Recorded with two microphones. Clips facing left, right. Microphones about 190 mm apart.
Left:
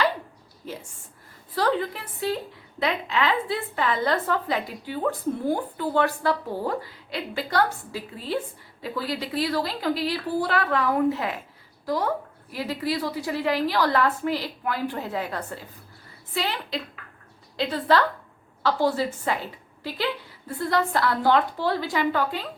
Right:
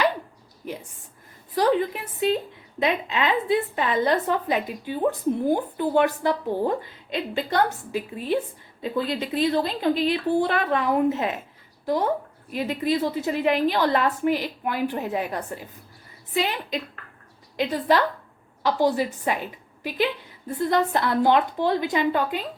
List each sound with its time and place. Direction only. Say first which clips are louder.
0.6 s a woman's voice: right 2 dB; 15° right (ahead or behind)